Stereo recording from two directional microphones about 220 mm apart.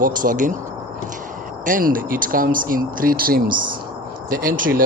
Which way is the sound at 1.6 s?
40° right (ahead or behind).